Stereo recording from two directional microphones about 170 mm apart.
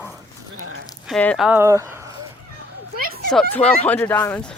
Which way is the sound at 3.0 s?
60° right (ahead or behind).